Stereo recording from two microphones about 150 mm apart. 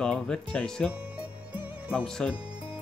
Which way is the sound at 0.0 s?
5° left (ahead or behind).